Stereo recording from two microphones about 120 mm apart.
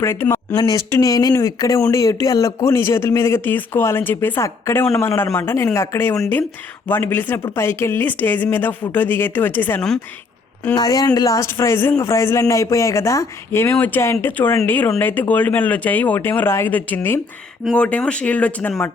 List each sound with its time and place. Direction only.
0.0 s speech: 20° left (ahead or behind)
0.5 s speech: 35° left (ahead or behind); by 9.8 s 15° left (ahead or behind)
10.8 s speech: 35° left (ahead or behind); by 18.9 s 15° left (ahead or behind)